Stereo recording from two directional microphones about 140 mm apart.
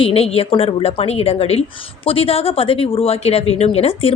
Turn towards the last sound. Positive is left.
turn(degrees=45)  # may be behind; listen again after turning